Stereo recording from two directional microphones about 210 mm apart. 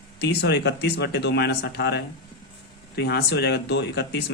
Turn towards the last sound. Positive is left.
turn(degrees=55)  # may be behind; listen again after turning